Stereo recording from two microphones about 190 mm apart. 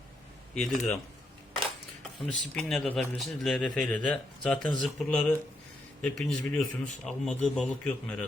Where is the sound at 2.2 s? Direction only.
Centre (ahead or behind).